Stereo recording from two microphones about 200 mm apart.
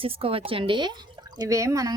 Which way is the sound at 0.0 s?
30° right (ahead or behind).